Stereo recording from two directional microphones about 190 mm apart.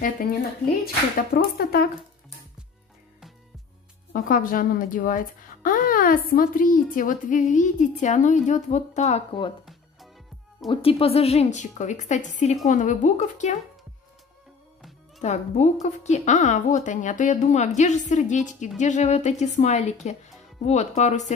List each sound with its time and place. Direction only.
1.3 s a woman's voice: 50° left (ahead or behind)
4.1 s a woman's voice: 45° left (ahead or behind); by 9.5 s 30° left (ahead or behind)
10.7 s a woman's voice: 30° left (ahead or behind)
14.8 s music: centre (ahead or behind)
15.2 s a woman's voice: 35° left (ahead or behind)